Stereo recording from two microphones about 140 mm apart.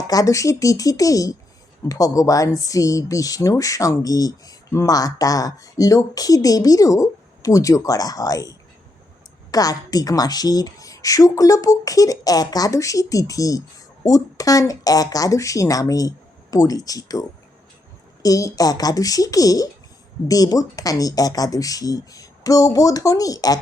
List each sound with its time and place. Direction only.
0.1 s a woman's voice: 25° left (ahead or behind)